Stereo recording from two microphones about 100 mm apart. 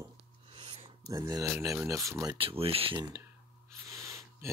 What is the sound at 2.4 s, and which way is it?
Speech, 70° right (ahead or behind).